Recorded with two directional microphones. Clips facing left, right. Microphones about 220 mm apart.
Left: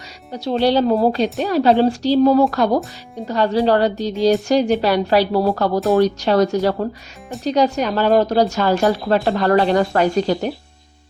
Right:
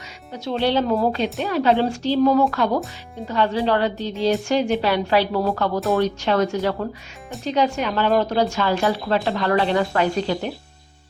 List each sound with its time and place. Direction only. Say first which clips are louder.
0.3 s a woman's voice: left 4 dB; 35° left (ahead or behind)